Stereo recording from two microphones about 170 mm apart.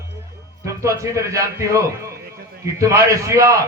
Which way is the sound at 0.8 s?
15° right (ahead or behind).